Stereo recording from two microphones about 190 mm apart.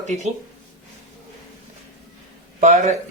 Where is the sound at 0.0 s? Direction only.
40° right (ahead or behind).